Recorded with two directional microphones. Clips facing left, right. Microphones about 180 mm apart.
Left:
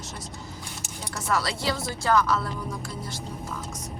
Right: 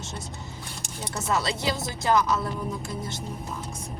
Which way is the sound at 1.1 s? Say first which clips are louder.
Right 1 dB; 25° right (ahead or behind).